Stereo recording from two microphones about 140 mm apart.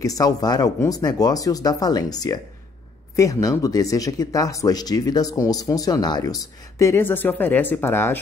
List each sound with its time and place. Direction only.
0.0 s speech: 25° left (ahead or behind)